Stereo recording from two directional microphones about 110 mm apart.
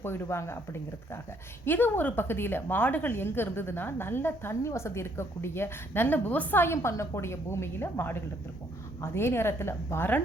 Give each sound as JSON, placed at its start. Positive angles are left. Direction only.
{"t": 0.0, "sound": "a woman's voice", "side_deg": 20}